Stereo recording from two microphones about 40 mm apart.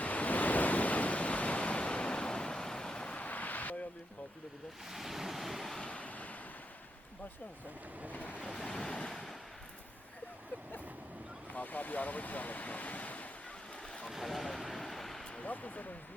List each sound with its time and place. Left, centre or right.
0.0 s waves: left
3.2 s a sound: left
4.9 s waves: centre
6.0 s waves: left
8.1 s waves: left
8.7 s waves: centre
11.5 s speech: left
14.1 s a sound: centre
15.4 s speech: left